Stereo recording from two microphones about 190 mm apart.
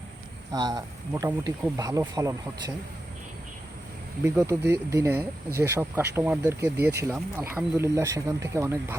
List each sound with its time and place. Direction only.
0.5 s speech: 20° right (ahead or behind)
4.2 s speech: 15° right (ahead or behind)